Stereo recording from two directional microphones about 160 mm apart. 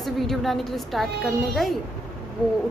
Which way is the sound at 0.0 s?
Centre (ahead or behind).